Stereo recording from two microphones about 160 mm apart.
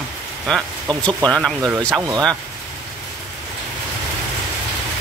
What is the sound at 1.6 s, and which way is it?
Speech, 20° right (ahead or behind).